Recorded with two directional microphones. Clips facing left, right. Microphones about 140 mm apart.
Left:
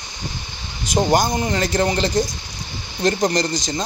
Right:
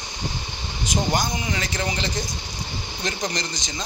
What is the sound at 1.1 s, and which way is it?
Speech, 45° left (ahead or behind).